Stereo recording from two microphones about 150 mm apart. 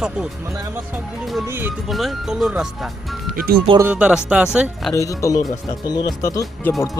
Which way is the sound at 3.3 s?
90° right.